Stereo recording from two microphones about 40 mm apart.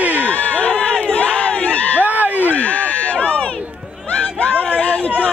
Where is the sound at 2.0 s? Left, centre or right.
Right.